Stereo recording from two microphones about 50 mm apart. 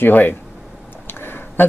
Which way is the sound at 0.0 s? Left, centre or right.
Left.